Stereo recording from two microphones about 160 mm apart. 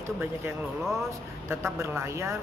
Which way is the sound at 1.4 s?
15° right (ahead or behind).